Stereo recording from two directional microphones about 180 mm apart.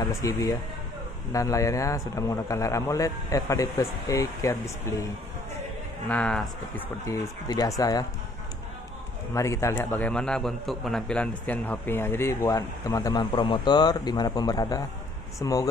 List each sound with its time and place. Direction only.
0.0 s a man's voice: 20° left (ahead or behind)
6.0 s a man's voice: 5° left (ahead or behind)
7.1 s speech: 20° left (ahead or behind)
9.3 s a man's voice: 15° left (ahead or behind)